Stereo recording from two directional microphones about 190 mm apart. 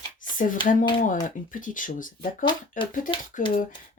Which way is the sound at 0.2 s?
45° left (ahead or behind).